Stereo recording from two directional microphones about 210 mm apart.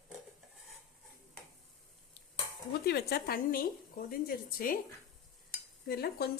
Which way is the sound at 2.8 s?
50° left (ahead or behind).